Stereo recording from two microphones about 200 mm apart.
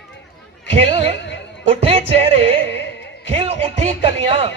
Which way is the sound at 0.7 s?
30° right (ahead or behind).